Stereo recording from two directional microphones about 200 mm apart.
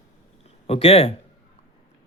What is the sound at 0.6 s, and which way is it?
Speech, 30° left (ahead or behind).